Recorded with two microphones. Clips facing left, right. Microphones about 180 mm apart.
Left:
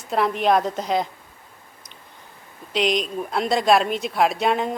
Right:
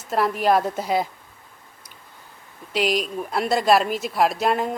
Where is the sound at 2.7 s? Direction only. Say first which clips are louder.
Left 1 dB; 5° right (ahead or behind).